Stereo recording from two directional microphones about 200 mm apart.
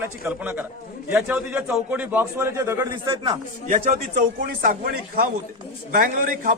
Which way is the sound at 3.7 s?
40° right (ahead or behind).